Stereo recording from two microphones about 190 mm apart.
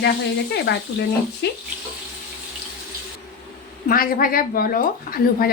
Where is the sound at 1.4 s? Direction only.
60° left (ahead or behind).